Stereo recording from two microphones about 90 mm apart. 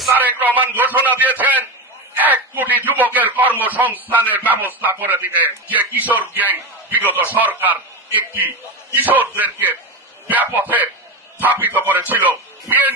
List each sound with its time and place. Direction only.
0.1 s a man's voice: 20° right (ahead or behind)